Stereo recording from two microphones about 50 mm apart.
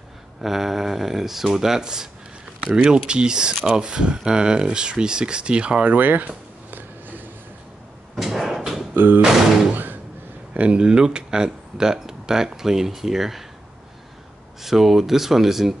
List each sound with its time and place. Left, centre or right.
0.4 s speech: centre; by 7.2 s right
8.2 s a sound: centre
8.9 s music: right
9.2 s speech: centre
10.5 s speech: right; by 13.4 s centre
14.6 s speech: centre